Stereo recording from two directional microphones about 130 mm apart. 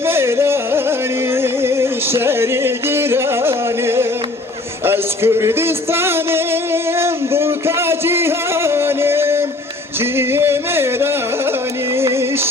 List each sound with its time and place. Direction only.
0.0 s music: 20° right (ahead or behind)